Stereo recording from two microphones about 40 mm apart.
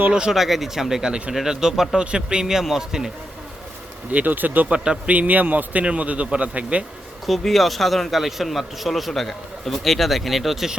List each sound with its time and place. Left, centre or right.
0.1 s a man's voice: right
0.3 s a man's voice: centre
2.0 s a man's voice: right
4.1 s a man's voice: right
4.7 s a man's voice: right
5.1 s a man's voice: right
5.8 s speech: right
7.3 s a man's voice: centre